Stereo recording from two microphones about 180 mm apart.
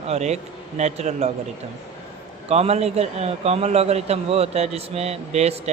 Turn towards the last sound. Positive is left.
turn(degrees=-35)  # may be behind; listen again after turning